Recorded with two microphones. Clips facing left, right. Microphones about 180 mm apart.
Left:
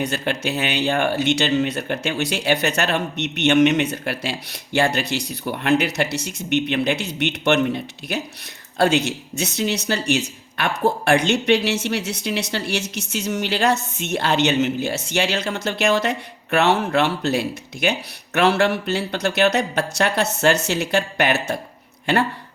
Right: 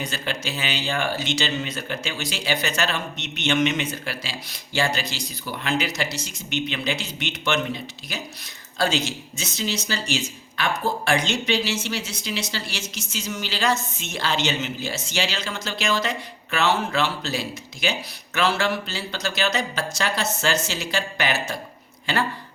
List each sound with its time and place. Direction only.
0.0 s speech: 60° left (ahead or behind)